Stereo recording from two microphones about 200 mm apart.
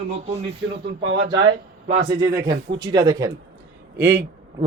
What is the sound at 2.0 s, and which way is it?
A man's voice, 15° right (ahead or behind).